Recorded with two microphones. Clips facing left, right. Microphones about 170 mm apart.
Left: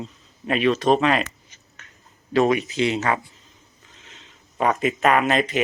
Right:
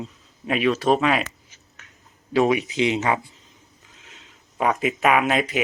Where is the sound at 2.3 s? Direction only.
10° right (ahead or behind).